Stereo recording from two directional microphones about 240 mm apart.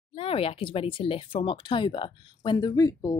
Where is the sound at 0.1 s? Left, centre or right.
Left.